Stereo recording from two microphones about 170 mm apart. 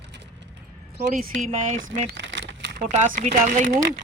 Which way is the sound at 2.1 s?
90° right.